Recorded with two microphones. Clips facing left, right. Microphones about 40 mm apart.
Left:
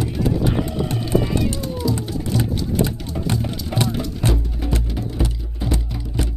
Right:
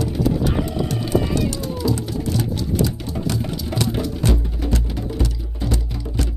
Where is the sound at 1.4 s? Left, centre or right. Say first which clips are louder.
Even; left.